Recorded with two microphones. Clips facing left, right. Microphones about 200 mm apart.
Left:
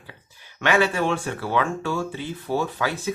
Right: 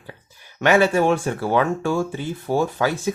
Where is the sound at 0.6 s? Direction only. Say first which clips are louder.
Right 5 dB; 40° right (ahead or behind).